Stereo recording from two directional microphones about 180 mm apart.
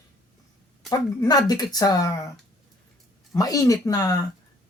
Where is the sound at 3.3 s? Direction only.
20° left (ahead or behind).